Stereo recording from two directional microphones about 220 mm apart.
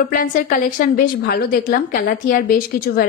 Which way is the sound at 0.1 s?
35° left (ahead or behind).